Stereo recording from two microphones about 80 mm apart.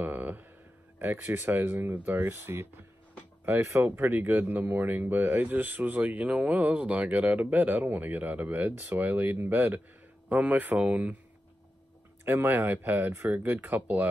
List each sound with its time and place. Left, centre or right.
0.0 s a sound: right
0.9 s speech: right
12.3 s speech: right